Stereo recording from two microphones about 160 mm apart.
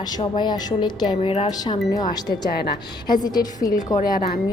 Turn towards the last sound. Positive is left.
turn(degrees=65)  # may be behind; listen again after turning